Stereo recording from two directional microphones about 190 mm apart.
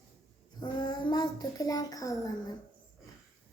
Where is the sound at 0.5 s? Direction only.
20° left (ahead or behind).